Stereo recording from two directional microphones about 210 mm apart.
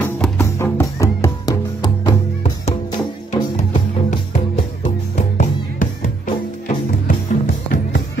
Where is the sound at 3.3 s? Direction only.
25° left (ahead or behind).